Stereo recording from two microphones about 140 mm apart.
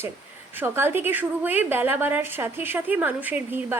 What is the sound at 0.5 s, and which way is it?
A woman's voice, 15° right (ahead or behind).